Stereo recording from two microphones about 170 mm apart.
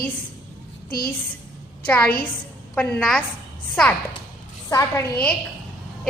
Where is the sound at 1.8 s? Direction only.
10° left (ahead or behind).